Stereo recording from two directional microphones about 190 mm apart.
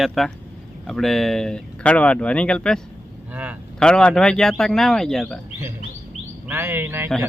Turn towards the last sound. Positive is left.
turn(degrees=-10)  # may be behind; listen again after turning